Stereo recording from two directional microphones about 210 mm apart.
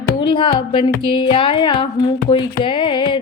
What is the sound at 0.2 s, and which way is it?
Speech, 25° left (ahead or behind).